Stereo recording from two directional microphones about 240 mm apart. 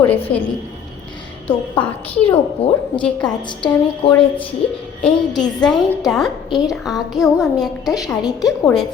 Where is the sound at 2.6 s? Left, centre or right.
Left.